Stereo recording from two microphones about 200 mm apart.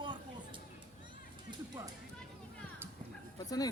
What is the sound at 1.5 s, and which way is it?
Music, 20° right (ahead or behind).